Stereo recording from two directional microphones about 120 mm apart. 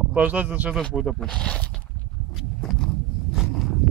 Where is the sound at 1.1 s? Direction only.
10° left (ahead or behind).